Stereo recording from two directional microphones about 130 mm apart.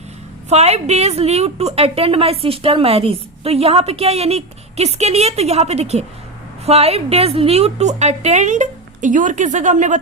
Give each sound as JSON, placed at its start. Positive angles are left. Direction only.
{"t": 0.5, "sound": "a woman's voice", "side_deg": -55}